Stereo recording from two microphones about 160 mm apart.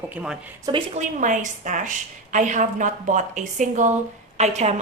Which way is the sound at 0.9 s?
50° right (ahead or behind).